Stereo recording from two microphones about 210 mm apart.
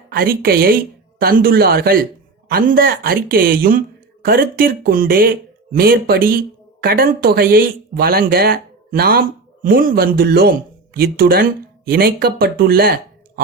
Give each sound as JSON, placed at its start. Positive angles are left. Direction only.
{"t": 0.1, "sound": "speech", "side_deg": -45}